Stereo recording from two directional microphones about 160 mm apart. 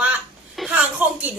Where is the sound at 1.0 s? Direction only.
10° right (ahead or behind).